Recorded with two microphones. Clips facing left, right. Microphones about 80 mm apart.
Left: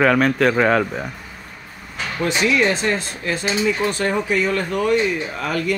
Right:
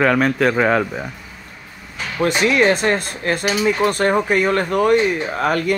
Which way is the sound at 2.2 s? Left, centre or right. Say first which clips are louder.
Right 3 dB; right.